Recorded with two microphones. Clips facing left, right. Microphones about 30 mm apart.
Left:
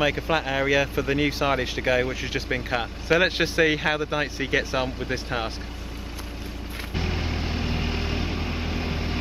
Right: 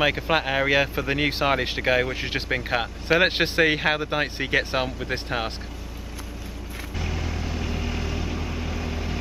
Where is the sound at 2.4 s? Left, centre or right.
Centre.